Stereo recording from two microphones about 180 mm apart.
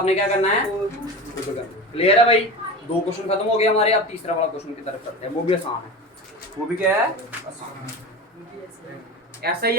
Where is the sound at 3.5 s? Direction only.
35° left (ahead or behind).